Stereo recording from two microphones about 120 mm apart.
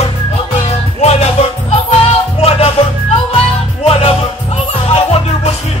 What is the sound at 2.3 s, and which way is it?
Music, 55° left (ahead or behind).